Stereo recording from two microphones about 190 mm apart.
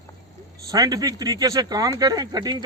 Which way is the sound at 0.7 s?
20° right (ahead or behind).